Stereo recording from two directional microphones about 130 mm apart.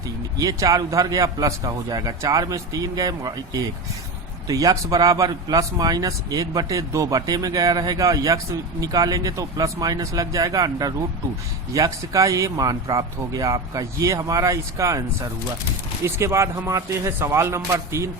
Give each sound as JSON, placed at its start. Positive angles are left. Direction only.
{"t": 0.3, "sound": "speech", "side_deg": -30}
{"t": 16.0, "sound": "speech", "side_deg": -20}